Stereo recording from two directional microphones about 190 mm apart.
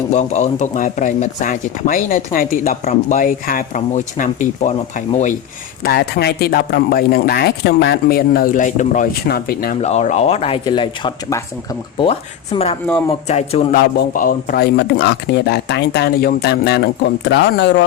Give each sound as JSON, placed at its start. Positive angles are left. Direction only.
{"t": 0.1, "sound": "speech", "side_deg": 35}
{"t": 5.8, "sound": "speech", "side_deg": 55}
{"t": 9.8, "sound": "speech", "side_deg": 35}
{"t": 12.5, "sound": "speech", "side_deg": 30}
{"t": 13.7, "sound": "speech", "side_deg": 45}